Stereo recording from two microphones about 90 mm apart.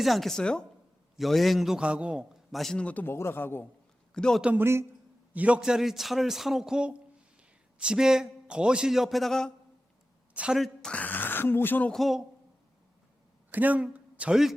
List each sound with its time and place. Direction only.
0.0 s a man's voice: centre (ahead or behind)
2.8 s speech: 20° left (ahead or behind)
4.1 s a man's voice: 10° left (ahead or behind)
4.5 s a man's voice: 30° right (ahead or behind)
5.3 s a man's voice: 15° right (ahead or behind); by 9.5 s 5° left (ahead or behind)
10.3 s a woman's voice: 10° right (ahead or behind)
10.9 s speech: 20° left (ahead or behind)
11.9 s a man's voice: centre (ahead or behind)
13.5 s a man's voice: 20° right (ahead or behind)